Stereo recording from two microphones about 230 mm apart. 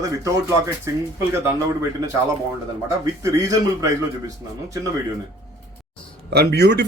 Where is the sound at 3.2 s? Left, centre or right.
Centre.